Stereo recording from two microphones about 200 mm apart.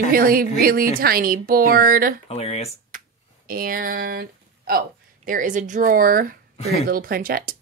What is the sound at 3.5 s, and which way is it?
Speech, 45° right (ahead or behind).